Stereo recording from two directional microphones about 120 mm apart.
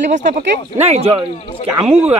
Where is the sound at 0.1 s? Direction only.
85° right; by 1.1 s 65° right (ahead or behind).